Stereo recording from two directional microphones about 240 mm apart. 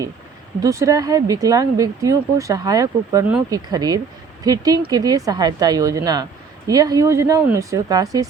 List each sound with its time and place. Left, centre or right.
0.6 s speech: centre